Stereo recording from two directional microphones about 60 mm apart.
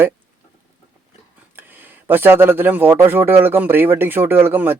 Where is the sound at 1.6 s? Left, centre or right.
Right.